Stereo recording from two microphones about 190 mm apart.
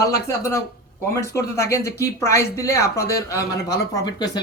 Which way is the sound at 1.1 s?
15° left (ahead or behind).